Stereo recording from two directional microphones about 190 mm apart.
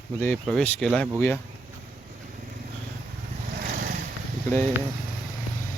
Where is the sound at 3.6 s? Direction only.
55° right (ahead or behind).